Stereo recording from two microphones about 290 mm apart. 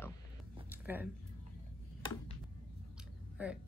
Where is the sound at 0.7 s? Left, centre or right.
Centre.